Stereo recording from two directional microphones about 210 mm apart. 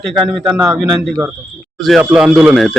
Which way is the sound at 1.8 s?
Centre (ahead or behind).